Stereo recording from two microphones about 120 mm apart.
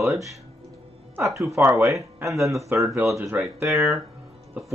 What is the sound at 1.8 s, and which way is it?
Speech, 25° right (ahead or behind).